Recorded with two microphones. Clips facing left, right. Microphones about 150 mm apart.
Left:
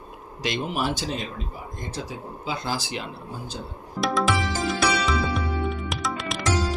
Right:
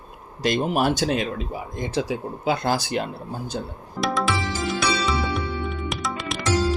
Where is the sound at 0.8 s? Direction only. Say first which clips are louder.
Right 6 dB; 65° right (ahead or behind).